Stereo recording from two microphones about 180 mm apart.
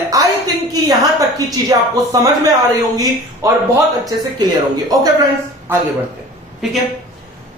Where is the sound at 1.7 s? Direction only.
20° right (ahead or behind).